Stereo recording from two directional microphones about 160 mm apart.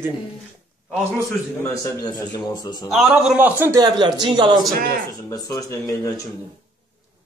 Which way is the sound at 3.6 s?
20° right (ahead or behind).